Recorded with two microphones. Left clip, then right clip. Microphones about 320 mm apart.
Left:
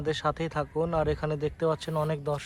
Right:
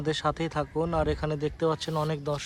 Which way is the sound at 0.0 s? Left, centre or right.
Centre.